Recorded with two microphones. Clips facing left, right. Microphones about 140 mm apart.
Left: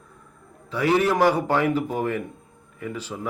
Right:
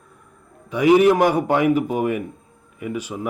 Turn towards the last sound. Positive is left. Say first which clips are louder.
# right 4 dB
turn(degrees=-15)  # may be behind; listen again after turning